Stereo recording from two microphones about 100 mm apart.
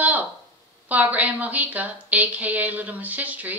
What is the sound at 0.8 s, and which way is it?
A woman's voice, 15° right (ahead or behind).